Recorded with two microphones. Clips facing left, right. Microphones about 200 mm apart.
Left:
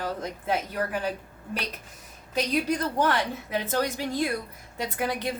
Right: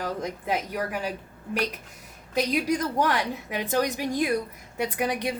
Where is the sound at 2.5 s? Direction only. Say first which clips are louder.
Left 1 dB; 15° right (ahead or behind).